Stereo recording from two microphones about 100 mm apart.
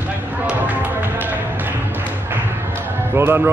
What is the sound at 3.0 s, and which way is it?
Basketball bounce, 25° right (ahead or behind).